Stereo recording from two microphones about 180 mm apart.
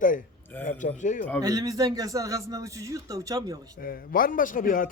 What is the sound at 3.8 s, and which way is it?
A man's voice, 55° left (ahead or behind).